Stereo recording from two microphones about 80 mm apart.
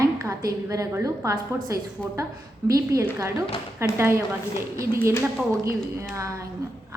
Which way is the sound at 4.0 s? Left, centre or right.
Right.